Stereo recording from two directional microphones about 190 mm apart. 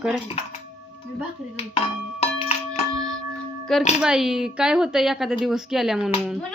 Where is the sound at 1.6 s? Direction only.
30° left (ahead or behind).